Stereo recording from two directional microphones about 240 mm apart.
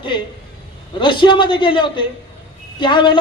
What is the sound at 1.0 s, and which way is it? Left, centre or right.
Speech, centre.